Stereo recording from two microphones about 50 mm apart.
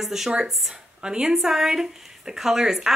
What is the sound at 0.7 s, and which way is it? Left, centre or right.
Speech, centre.